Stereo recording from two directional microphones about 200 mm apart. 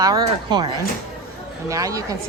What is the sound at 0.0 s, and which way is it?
A woman's voice, 20° right (ahead or behind).